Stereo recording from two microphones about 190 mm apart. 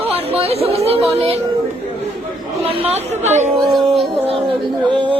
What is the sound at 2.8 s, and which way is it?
Speech, 35° right (ahead or behind).